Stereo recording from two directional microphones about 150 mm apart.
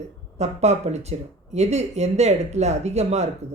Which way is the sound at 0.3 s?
45° right (ahead or behind).